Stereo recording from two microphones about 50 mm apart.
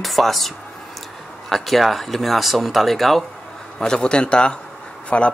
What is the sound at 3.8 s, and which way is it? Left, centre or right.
A man's voice, centre.